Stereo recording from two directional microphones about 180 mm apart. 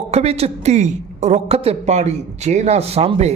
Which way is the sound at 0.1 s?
35° right (ahead or behind).